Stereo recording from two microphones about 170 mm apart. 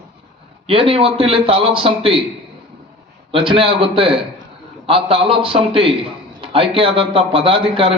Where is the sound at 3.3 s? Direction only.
30° right (ahead or behind).